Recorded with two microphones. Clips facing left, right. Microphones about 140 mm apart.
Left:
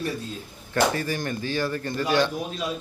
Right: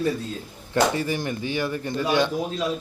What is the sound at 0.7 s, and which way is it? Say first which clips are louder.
A man's voice: right 2 dB; 15° right (ahead or behind).